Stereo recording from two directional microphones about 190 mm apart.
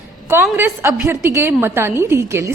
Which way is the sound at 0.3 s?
10° right (ahead or behind).